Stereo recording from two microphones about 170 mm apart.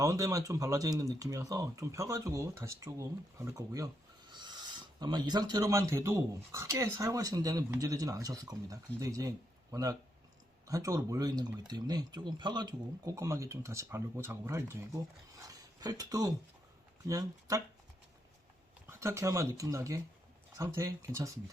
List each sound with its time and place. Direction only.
0.0 s speech: 20° right (ahead or behind)
18.9 s speech: 15° right (ahead or behind)